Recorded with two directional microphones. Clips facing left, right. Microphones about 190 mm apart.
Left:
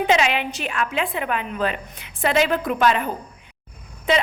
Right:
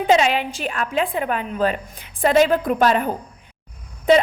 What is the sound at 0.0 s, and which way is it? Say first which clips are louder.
A woman's voice: right 3 dB; 35° right (ahead or behind).